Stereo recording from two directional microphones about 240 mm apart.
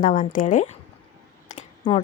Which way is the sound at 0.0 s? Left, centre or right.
Left.